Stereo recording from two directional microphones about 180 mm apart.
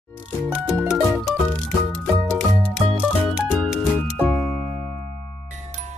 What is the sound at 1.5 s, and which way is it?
Music, 5° left (ahead or behind).